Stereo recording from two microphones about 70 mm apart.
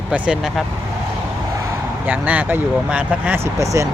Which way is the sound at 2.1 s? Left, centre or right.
Right.